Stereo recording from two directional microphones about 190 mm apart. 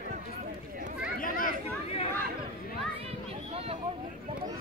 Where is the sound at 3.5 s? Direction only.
30° right (ahead or behind).